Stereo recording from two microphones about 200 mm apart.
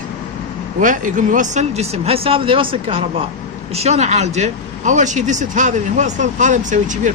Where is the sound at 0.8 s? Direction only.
40° right (ahead or behind).